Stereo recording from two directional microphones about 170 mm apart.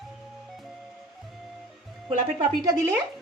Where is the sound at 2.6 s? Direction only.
20° right (ahead or behind).